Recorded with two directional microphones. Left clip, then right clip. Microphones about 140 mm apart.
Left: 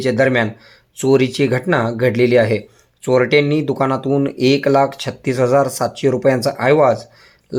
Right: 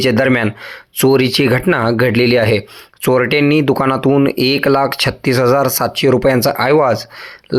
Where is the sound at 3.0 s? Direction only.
35° right (ahead or behind).